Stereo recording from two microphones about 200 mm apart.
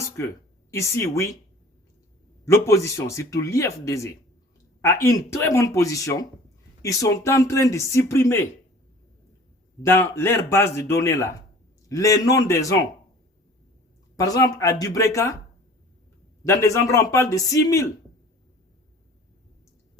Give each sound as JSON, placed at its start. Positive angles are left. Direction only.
{"t": 0.2, "sound": "speech", "side_deg": 10}
{"t": 2.6, "sound": "speech", "side_deg": 15}
{"t": 9.8, "sound": "speech", "side_deg": 10}
{"t": 14.3, "sound": "speech", "side_deg": 20}
{"t": 16.4, "sound": "speech", "side_deg": 15}